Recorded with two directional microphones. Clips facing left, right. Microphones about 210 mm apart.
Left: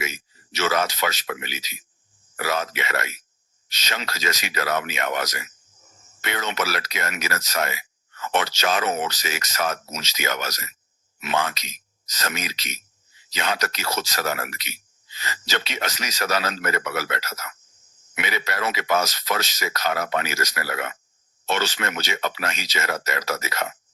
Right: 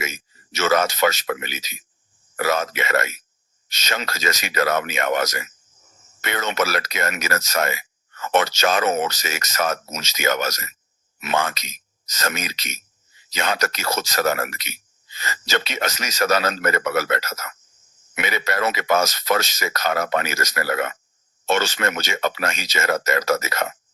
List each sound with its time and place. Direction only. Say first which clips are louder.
0.0 s speech: right 1 dB; 50° right (ahead or behind)